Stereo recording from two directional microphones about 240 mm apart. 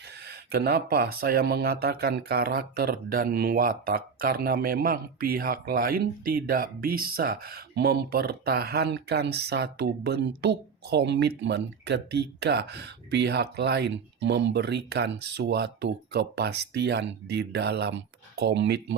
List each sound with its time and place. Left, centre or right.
0.3 s speech: right